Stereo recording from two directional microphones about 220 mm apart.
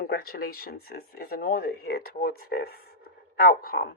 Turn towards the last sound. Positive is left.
turn(degrees=45)  # may be behind; listen again after turning